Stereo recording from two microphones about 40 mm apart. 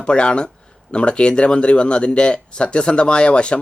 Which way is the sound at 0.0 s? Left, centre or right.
Left.